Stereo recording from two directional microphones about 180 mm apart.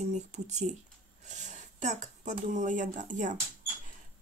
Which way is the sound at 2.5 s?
45° right (ahead or behind).